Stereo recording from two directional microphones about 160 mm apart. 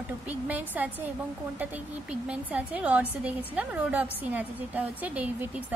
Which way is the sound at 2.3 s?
10° right (ahead or behind).